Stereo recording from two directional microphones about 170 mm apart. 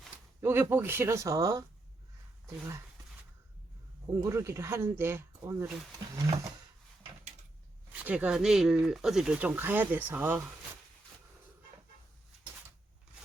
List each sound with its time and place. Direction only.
0.4 s speech: 15° right (ahead or behind)
4.1 s speech: 15° right (ahead or behind)
7.9 s speech: 10° right (ahead or behind)